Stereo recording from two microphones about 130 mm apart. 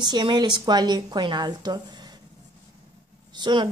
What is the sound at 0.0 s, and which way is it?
A woman's voice, 35° right (ahead or behind).